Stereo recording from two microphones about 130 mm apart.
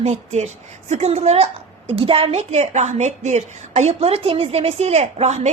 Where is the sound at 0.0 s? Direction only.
60° right (ahead or behind).